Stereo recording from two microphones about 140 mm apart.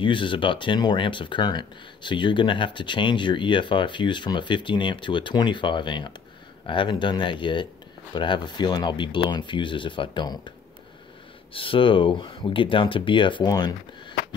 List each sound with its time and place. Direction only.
0.0 s speech: 35° left (ahead or behind)
11.5 s speech: 40° left (ahead or behind)